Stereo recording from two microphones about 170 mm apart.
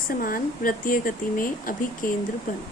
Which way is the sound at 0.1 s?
55° left (ahead or behind).